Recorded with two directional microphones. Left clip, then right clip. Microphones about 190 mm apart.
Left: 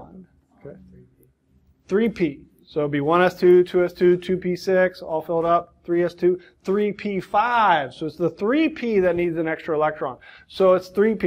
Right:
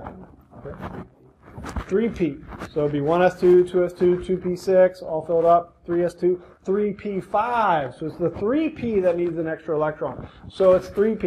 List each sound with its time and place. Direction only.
1.9 s speech: 25° left (ahead or behind)